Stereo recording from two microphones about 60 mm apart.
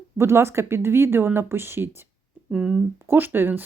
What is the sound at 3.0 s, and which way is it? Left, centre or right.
Speech, right.